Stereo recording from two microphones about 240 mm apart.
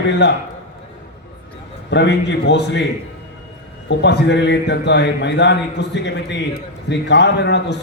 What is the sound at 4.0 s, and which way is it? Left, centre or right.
A man's voice, left.